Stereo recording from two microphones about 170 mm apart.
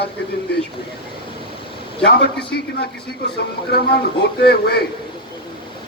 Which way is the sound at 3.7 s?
70° left (ahead or behind).